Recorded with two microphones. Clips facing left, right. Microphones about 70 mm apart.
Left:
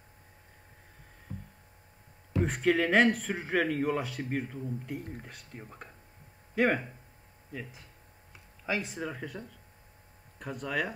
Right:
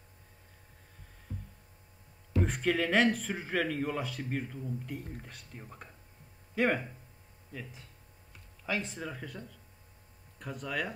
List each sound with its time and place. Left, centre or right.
1.3 s a sound: left
2.4 s speech: centre
8.6 s speech: centre